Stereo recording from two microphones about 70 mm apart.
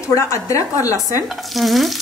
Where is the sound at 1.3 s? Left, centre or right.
Centre.